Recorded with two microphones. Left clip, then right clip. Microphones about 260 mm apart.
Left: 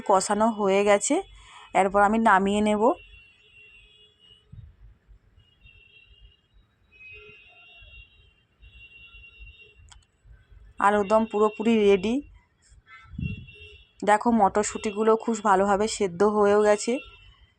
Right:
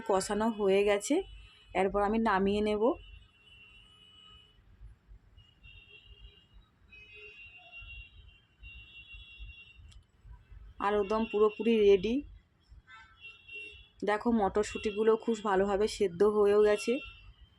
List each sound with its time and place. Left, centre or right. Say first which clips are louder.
0.1 s speech: left 9 dB; centre
10.8 s speech: left 9 dB; centre
14.0 s speech: left 9 dB; centre